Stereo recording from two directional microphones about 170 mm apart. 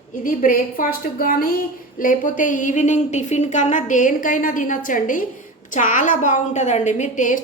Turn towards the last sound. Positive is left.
turn(degrees=50)  # may be behind; listen again after turning